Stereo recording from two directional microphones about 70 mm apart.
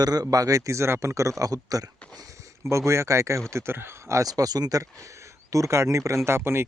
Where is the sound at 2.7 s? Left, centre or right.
Right.